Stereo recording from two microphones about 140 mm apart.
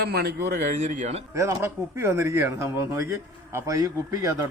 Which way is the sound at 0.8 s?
55° right (ahead or behind).